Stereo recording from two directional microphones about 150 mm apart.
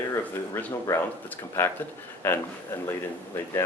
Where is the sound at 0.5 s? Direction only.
15° left (ahead or behind).